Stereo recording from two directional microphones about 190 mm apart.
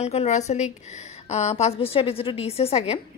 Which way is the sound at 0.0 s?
35° left (ahead or behind).